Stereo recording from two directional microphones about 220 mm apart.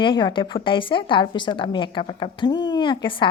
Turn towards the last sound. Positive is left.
turn(degrees=20)  # may be behind; listen again after turning